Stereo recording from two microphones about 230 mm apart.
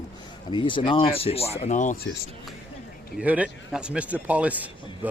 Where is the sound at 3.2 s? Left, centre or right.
Centre.